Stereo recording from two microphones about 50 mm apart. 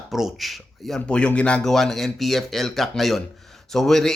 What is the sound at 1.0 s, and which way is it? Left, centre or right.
Speech, left.